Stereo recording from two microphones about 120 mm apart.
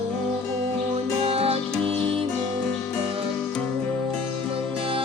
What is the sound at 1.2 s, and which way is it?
Music, 55° right (ahead or behind).